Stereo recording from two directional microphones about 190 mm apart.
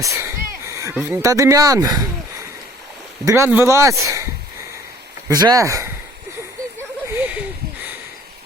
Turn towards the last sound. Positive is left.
turn(degrees=-10)  # may be behind; listen again after turning